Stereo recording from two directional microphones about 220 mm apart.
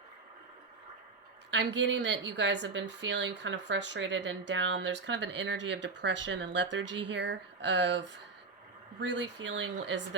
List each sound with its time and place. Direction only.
1.5 s a woman's voice: 55° right (ahead or behind)